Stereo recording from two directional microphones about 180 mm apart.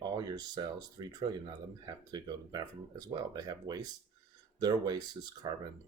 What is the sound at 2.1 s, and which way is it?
Speech, 20° right (ahead or behind).